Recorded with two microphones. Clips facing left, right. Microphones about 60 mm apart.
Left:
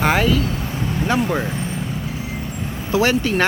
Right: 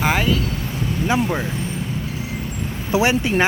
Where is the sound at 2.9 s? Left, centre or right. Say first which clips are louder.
Even; centre.